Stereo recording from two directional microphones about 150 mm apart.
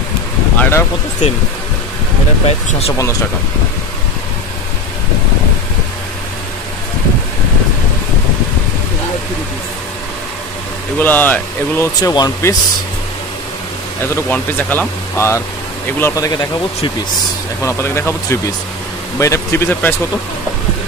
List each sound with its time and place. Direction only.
0.6 s a sound: 15° left (ahead or behind)
11.0 s speech: 10° left (ahead or behind)
12.0 s speech: 25° left (ahead or behind)
14.1 s speech: 10° left (ahead or behind)